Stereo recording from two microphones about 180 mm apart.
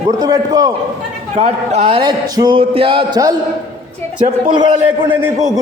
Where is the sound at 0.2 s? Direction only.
20° right (ahead or behind).